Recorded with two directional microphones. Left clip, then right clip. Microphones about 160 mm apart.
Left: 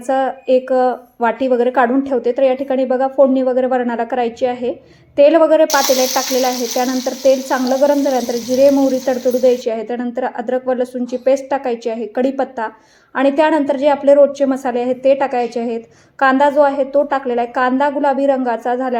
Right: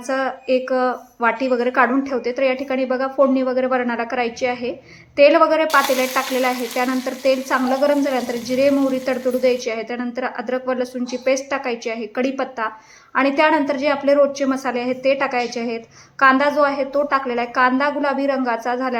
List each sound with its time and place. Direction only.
0.1 s a woman's voice: 35° left (ahead or behind)